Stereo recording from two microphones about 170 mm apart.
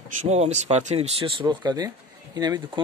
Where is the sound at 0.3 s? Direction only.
40° right (ahead or behind).